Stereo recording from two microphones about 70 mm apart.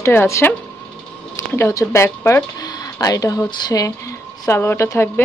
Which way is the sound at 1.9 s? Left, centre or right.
Left.